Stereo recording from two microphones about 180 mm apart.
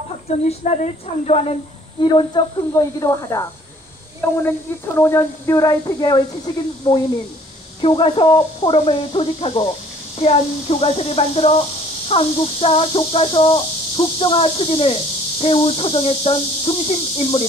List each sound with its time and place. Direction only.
0.5 s speech: 35° left (ahead or behind)
3.0 s speech: 20° left (ahead or behind)
4.5 s a woman's voice: 15° left (ahead or behind); by 17.4 s 30° left (ahead or behind)